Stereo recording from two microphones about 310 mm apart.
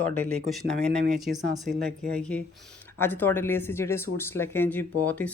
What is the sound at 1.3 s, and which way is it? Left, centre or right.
Speech, right.